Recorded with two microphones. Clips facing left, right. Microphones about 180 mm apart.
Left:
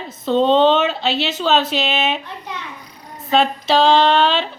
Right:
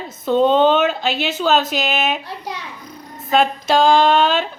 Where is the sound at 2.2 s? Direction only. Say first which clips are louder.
Right 2 dB; 35° right (ahead or behind).